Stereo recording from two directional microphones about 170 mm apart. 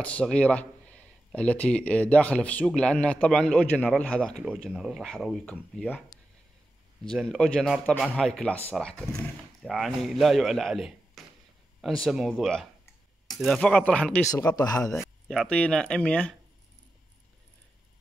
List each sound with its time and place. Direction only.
0.0 s speech: 5° left (ahead or behind)
4.2 s speech: 5° right (ahead or behind)
7.1 s speech: centre (ahead or behind)
14.3 s speech: 20° left (ahead or behind)
14.8 s speech: centre (ahead or behind)